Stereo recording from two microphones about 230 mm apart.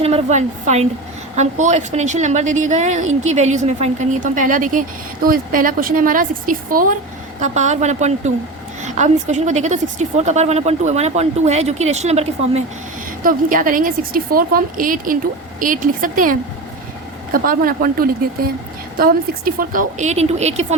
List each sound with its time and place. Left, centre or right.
0.0 s a woman's voice: right